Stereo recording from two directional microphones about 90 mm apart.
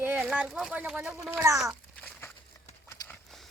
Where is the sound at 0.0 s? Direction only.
20° right (ahead or behind).